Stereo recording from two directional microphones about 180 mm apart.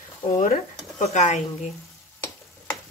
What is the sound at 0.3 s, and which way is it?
Speech, 45° left (ahead or behind).